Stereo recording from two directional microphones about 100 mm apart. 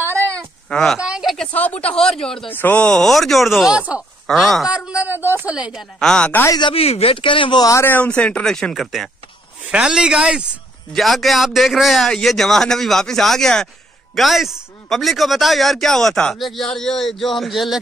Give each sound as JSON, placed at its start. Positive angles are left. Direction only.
{"t": 0.4, "sound": "cat", "side_deg": 5}
{"t": 0.9, "sound": "speech", "side_deg": -10}
{"t": 1.5, "sound": "speech", "side_deg": 15}
{"t": 2.5, "sound": "speech", "side_deg": 15}
{"t": 4.6, "sound": "a woman's voice", "side_deg": -10}
{"t": 5.9, "sound": "speech", "side_deg": 10}
{"t": 6.7, "sound": "speech", "side_deg": 80}
{"t": 7.8, "sound": "speech", "side_deg": 15}
{"t": 9.7, "sound": "a woman's voice", "side_deg": -10}
{"t": 10.9, "sound": "speech", "side_deg": 0}